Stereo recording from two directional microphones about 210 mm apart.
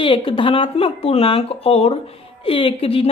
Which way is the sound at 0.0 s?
25° left (ahead or behind).